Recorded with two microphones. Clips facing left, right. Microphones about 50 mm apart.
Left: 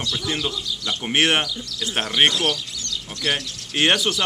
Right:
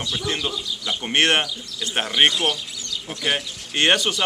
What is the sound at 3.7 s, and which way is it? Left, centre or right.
Speech, centre.